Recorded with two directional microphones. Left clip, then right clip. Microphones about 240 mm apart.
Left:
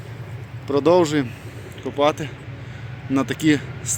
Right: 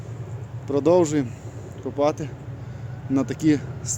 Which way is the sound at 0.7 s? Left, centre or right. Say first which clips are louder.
Left 2 dB; centre.